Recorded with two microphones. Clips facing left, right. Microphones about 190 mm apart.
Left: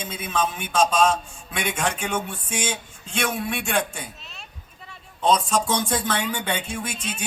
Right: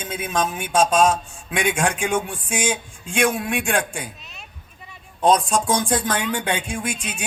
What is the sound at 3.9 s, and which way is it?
Speech, 10° right (ahead or behind).